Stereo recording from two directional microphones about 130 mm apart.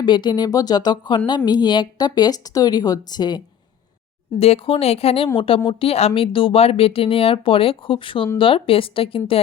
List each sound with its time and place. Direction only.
0.0 s speech: 35° left (ahead or behind)
4.4 s speech: 50° left (ahead or behind)